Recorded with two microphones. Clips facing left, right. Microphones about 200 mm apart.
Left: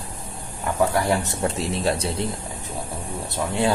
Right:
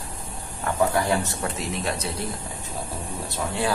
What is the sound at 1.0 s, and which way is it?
Speech, 20° left (ahead or behind).